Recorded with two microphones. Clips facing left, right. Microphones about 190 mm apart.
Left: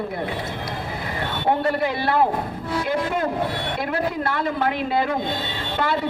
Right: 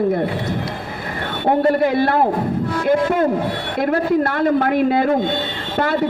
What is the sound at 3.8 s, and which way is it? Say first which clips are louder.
A woman's voice: right 9 dB; 50° right (ahead or behind).